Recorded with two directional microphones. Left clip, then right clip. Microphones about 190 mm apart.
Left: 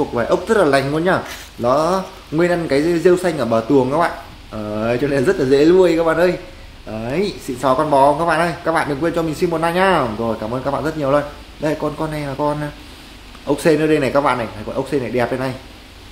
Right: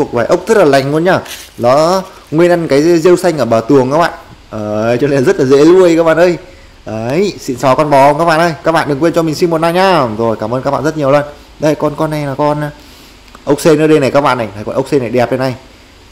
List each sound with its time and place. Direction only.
0.1 s speech: 35° right (ahead or behind)